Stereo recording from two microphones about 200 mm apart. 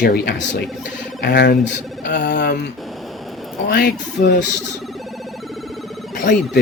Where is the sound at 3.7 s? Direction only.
50° left (ahead or behind).